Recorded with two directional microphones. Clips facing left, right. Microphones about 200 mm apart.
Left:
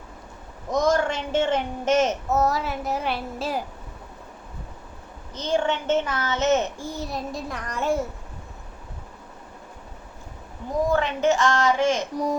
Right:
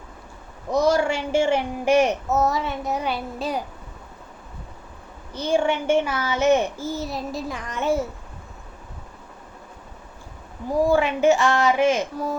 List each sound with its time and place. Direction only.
0.7 s a man's voice: 10° right (ahead or behind)
2.3 s child singing: centre (ahead or behind)
5.3 s a man's voice: 10° right (ahead or behind)
6.7 s child singing: centre (ahead or behind)
10.9 s a man's voice: 15° right (ahead or behind)
12.1 s speech: 15° left (ahead or behind)